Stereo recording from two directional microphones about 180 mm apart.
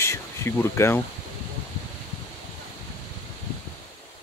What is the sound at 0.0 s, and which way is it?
Speech, 15° left (ahead or behind).